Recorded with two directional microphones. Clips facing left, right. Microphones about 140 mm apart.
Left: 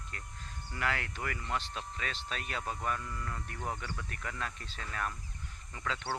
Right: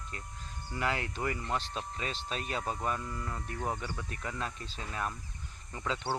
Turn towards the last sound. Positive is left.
turn(degrees=-20)  # may be behind; listen again after turning